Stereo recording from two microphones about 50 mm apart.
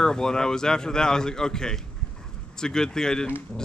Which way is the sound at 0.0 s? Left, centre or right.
Centre.